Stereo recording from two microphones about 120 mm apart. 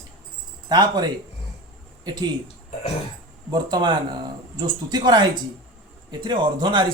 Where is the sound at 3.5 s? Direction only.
35° right (ahead or behind).